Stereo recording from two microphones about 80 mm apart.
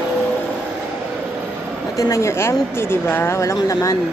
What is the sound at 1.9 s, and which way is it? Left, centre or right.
Speech, left.